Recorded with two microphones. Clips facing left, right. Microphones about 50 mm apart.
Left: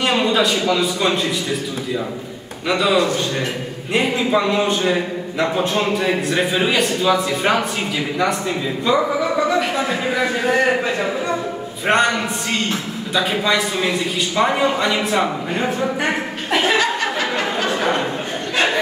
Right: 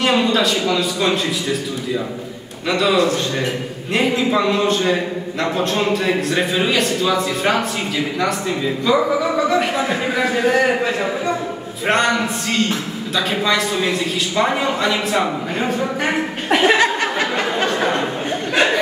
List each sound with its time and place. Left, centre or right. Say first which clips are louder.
0.0 s a man's voice: right 1 dB; centre
2.7 s a man's voice: right 1 dB; centre
16.5 s a sound: right 3 dB; right